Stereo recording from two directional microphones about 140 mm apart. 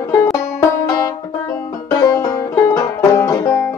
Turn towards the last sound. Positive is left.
turn(degrees=15)  # may be behind; listen again after turning